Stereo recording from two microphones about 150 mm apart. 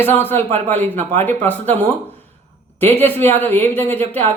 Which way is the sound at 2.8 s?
15° left (ahead or behind).